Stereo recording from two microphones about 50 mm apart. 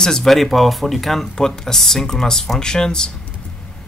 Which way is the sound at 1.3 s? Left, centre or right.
Centre.